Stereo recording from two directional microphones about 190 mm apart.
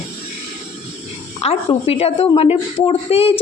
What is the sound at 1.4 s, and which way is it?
A woman's voice, 35° left (ahead or behind).